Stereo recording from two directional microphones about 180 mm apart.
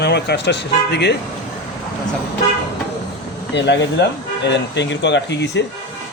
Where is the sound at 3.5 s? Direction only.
75° left (ahead or behind).